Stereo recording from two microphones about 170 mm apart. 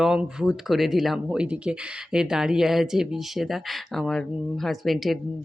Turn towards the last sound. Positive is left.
turn(degrees=0)  # may be behind; listen again after turning